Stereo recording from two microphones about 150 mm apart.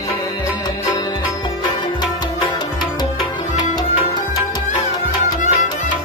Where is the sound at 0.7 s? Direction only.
30° left (ahead or behind).